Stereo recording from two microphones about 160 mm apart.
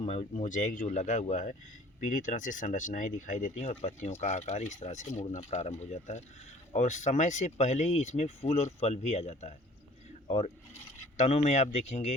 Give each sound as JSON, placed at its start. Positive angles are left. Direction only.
{"t": 0.0, "sound": "speech", "side_deg": 45}